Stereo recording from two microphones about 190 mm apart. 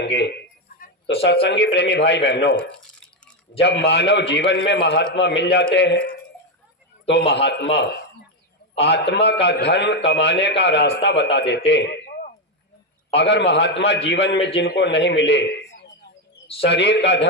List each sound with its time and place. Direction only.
0.0 s a sound: 65° left (ahead or behind)
1.0 s a man's voice: 65° left (ahead or behind)
3.6 s a man's voice: 60° left (ahead or behind)
13.1 s a man's voice: 65° left (ahead or behind)